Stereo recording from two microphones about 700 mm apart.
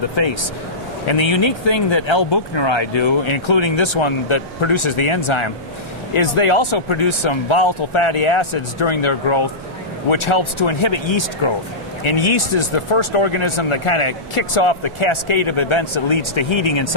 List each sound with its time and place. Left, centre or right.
0.2 s speech: left